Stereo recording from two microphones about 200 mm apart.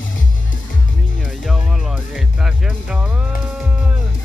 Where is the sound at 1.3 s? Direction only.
Centre (ahead or behind).